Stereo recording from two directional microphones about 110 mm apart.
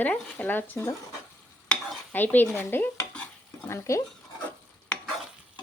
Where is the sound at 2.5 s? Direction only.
20° left (ahead or behind).